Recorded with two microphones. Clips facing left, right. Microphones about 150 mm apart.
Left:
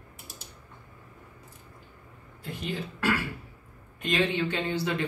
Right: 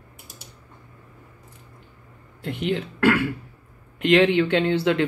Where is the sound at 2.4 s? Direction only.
75° right (ahead or behind).